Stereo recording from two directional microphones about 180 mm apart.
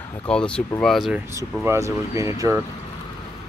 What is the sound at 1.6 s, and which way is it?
Speech, 15° right (ahead or behind).